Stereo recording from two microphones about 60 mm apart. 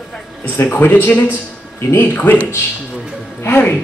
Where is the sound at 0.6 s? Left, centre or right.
Left.